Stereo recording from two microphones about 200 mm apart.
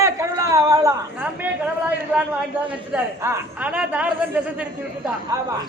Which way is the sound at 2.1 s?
5° right (ahead or behind).